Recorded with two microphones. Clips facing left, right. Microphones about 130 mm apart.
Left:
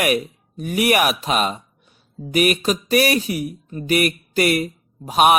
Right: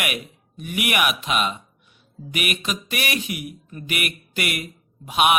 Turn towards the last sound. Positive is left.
turn(degrees=40)  # may be behind; listen again after turning